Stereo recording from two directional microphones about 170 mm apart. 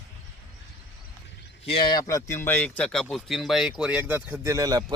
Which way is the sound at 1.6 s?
30° left (ahead or behind).